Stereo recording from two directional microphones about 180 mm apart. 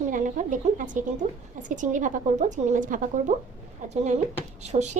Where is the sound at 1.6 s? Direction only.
45° right (ahead or behind).